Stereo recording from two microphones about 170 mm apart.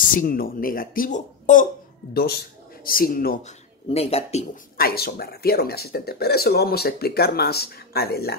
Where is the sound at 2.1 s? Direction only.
65° left (ahead or behind).